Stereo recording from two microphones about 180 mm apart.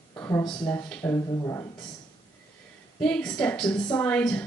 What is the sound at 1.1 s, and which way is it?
Speech, 20° left (ahead or behind).